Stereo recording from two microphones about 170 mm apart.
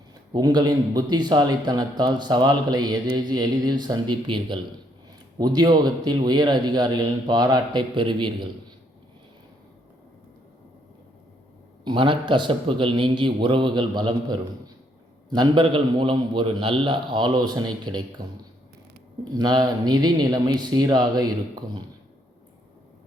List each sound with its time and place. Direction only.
0.1 s a man's voice: 25° right (ahead or behind)
11.9 s a man's voice: 30° right (ahead or behind)
19.3 s a man's voice: 25° right (ahead or behind)